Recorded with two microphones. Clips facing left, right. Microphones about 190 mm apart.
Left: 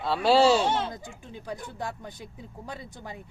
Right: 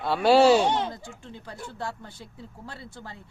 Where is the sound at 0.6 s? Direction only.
15° right (ahead or behind).